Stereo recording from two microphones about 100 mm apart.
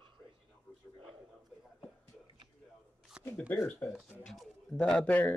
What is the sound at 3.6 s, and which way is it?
Speech, 5° left (ahead or behind).